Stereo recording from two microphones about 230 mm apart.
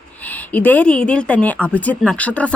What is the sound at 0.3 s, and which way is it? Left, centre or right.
A woman's voice, centre.